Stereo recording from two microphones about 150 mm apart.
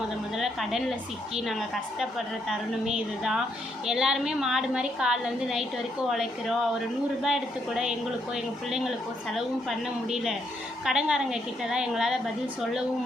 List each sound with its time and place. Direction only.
0.3 s a woman's voice: centre (ahead or behind)
7.2 s a woman's voice: 5° right (ahead or behind)
9.3 s a woman's voice: centre (ahead or behind)